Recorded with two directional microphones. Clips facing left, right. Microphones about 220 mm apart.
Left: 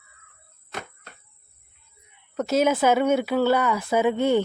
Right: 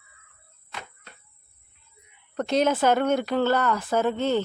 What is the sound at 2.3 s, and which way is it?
A woman's voice, 5° left (ahead or behind).